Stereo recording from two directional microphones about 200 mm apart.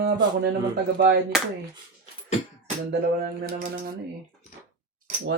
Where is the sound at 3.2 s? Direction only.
50° right (ahead or behind).